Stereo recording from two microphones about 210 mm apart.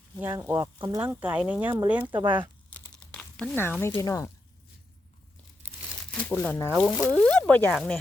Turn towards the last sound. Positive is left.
turn(degrees=5)  # may be behind; listen again after turning